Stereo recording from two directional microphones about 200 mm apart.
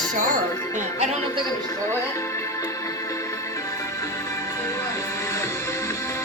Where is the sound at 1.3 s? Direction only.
15° left (ahead or behind).